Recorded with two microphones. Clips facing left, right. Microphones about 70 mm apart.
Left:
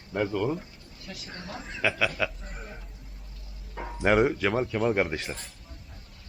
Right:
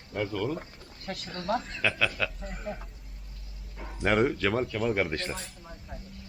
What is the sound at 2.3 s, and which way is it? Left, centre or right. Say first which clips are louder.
Speech: right 5 dB; centre.